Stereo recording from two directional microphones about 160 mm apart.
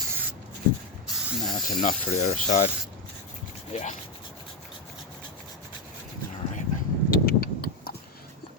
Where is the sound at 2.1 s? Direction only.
45° left (ahead or behind).